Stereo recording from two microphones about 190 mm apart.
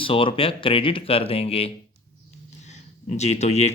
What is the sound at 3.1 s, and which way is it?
Speech, 35° left (ahead or behind).